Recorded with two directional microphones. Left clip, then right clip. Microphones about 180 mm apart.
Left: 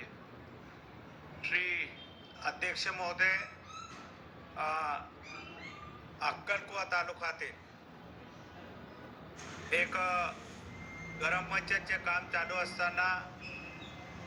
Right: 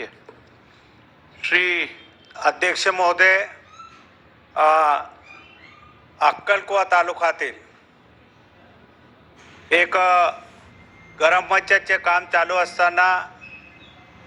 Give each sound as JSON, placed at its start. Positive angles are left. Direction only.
{"t": 1.4, "sound": "a man's voice", "side_deg": -50}
{"t": 4.5, "sound": "a man's voice", "side_deg": -50}
{"t": 6.1, "sound": "a man's voice", "side_deg": -55}
{"t": 9.6, "sound": "a man's voice", "side_deg": -50}